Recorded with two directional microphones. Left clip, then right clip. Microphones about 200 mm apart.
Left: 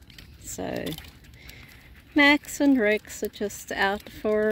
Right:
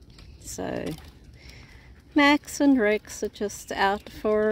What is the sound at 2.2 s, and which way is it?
A woman's voice, centre (ahead or behind).